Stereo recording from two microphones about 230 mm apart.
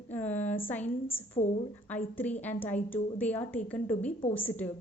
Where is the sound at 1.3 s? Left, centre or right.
Left.